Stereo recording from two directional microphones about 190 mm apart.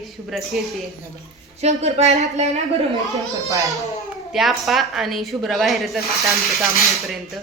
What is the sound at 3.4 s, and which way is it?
Speech, 15° right (ahead or behind).